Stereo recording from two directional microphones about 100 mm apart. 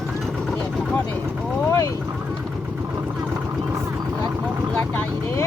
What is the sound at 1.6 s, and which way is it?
Vehicle, 30° left (ahead or behind).